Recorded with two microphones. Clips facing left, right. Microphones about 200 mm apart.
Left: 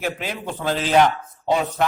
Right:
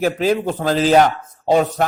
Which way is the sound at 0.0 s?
40° right (ahead or behind).